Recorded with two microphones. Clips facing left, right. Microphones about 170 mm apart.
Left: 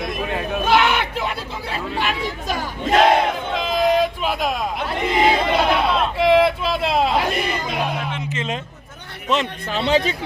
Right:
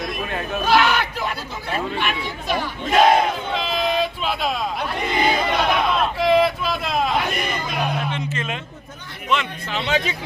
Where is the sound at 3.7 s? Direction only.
45° left (ahead or behind).